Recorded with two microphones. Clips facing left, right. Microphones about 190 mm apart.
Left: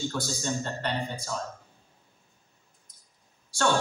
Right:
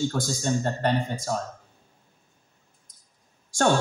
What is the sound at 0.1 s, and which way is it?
Speech, 50° right (ahead or behind).